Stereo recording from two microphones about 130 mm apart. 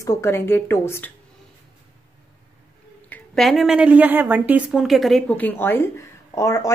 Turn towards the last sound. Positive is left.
turn(degrees=20)  # may be behind; listen again after turning